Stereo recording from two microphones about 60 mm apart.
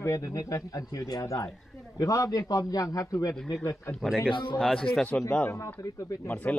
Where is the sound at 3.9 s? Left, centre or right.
Centre.